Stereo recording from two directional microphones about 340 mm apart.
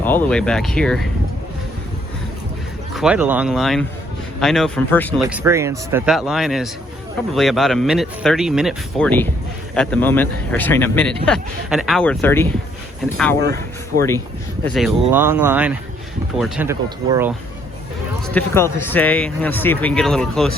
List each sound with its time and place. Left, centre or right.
0.0 s speech: centre
2.9 s speech: centre
5.2 s speech: centre
13.4 s speech: right
14.6 s speech: centre
18.3 s speech: centre